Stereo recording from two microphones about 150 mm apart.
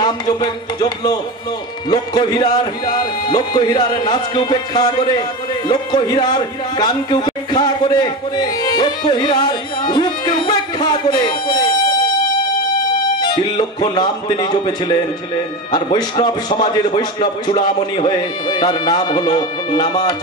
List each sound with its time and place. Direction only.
0.0 s speech: 25° left (ahead or behind)
13.2 s speech: 30° left (ahead or behind)